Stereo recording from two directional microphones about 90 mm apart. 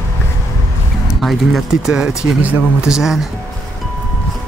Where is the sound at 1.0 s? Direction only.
Centre (ahead or behind).